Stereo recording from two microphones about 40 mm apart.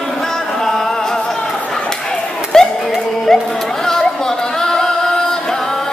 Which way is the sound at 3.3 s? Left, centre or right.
Centre.